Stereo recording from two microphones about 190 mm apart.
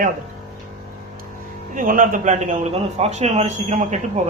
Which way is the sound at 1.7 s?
45° right (ahead or behind).